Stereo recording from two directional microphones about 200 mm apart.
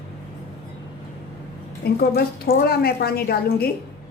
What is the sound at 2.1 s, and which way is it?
A woman's voice, 50° left (ahead or behind).